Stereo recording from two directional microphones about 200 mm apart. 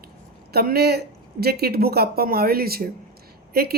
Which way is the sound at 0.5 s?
50° right (ahead or behind).